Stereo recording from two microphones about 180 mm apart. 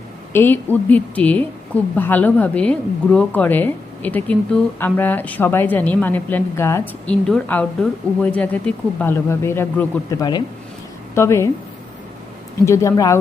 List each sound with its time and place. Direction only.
0.3 s a woman's voice: 10° left (ahead or behind)
12.6 s a woman's voice: 15° left (ahead or behind)